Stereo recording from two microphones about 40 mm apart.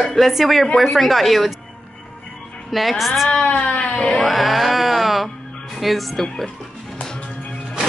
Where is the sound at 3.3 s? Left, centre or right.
Left.